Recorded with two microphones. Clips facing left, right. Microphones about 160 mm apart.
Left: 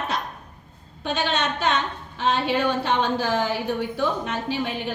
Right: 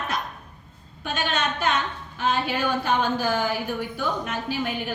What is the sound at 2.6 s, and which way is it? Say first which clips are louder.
A woman's voice: left 1 dB; 30° left (ahead or behind).